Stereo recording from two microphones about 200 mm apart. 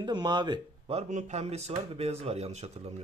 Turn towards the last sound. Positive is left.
turn(degrees=-35)  # may be behind; listen again after turning